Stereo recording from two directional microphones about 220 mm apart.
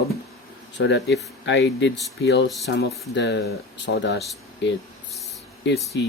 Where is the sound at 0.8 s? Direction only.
55° left (ahead or behind).